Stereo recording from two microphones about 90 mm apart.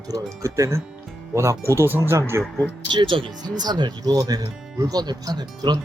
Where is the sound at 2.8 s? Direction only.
65° right (ahead or behind); by 5.7 s 50° right (ahead or behind).